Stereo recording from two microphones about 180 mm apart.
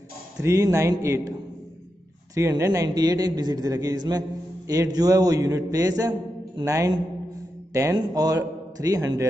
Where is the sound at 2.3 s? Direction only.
15° right (ahead or behind).